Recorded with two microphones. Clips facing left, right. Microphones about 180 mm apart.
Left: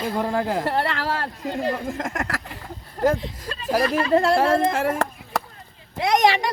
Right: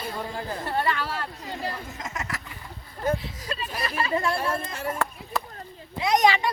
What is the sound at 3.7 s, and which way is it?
A woman's voice, 90° left.